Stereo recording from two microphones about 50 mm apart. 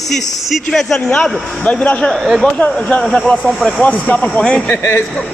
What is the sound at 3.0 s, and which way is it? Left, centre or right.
Speech, centre.